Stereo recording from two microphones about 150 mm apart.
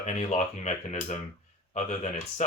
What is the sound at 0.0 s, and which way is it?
Speech, 50° left (ahead or behind).